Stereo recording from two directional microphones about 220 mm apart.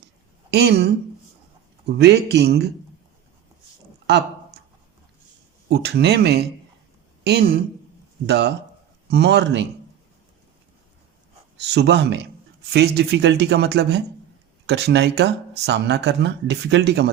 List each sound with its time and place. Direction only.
0.5 s speech: 50° right (ahead or behind)
2.0 s speech: 50° right (ahead or behind)
5.6 s speech: 50° right (ahead or behind)
11.6 s speech: 50° right (ahead or behind)